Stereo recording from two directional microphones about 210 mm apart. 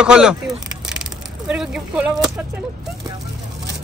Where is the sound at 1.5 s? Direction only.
5° right (ahead or behind).